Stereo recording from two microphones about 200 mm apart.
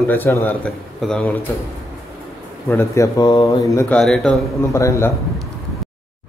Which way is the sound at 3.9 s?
Centre (ahead or behind).